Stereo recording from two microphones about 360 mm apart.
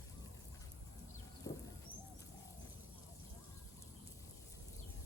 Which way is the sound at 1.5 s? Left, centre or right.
Centre.